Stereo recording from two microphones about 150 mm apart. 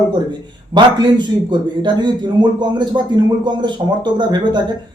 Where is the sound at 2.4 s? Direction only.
30° right (ahead or behind).